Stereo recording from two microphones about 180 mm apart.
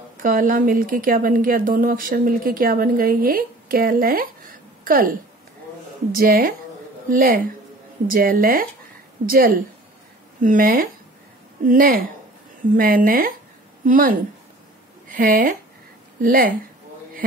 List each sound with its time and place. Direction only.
0.2 s a woman's voice: 50° right (ahead or behind)
6.1 s a woman's voice: 50° right (ahead or behind)